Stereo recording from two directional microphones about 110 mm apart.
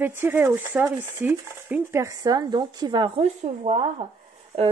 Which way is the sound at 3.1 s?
80° right.